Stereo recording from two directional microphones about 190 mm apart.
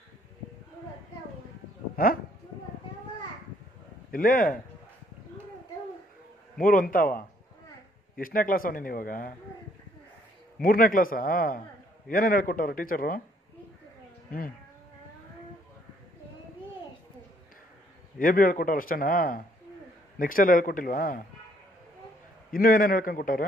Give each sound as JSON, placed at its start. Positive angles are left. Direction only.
{"t": 4.1, "sound": "a man's voice", "side_deg": 50}
{"t": 6.6, "sound": "a man's voice", "side_deg": 45}
{"t": 10.6, "sound": "a man's voice", "side_deg": 50}
{"t": 18.2, "sound": "a man's voice", "side_deg": 45}
{"t": 22.5, "sound": "a man's voice", "side_deg": 50}